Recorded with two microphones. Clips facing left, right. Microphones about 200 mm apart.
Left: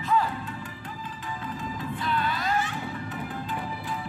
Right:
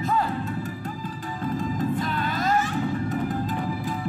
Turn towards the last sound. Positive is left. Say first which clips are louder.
# right 8 dB
turn(degrees=-40)  # may be behind; listen again after turning